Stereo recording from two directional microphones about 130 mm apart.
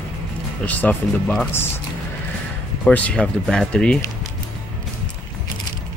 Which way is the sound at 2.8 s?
10° left (ahead or behind).